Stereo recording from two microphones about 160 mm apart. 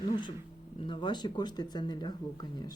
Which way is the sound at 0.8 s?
30° left (ahead or behind).